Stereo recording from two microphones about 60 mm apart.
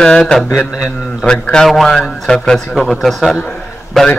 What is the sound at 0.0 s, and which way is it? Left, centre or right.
A man's voice, centre.